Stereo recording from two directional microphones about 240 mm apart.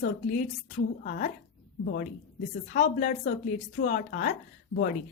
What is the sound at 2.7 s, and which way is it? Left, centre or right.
A woman's voice, left.